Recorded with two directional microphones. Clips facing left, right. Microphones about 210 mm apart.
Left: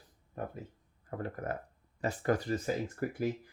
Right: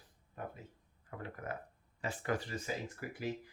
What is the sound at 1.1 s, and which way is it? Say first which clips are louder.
Speech: left 6 dB; 45° left (ahead or behind).